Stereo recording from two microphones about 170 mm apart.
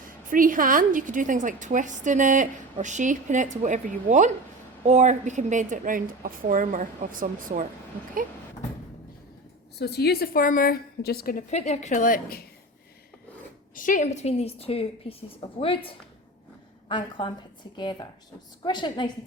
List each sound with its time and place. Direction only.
0.3 s a woman's voice: 55° right (ahead or behind)
9.7 s a woman's voice: 70° left (ahead or behind)
11.5 s a woman's voice: 40° left (ahead or behind); by 12.5 s 60° left (ahead or behind)
13.7 s a woman's voice: 50° left (ahead or behind); by 19.1 s 25° left (ahead or behind)